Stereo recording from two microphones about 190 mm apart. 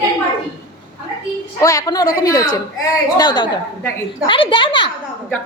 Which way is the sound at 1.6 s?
20° left (ahead or behind).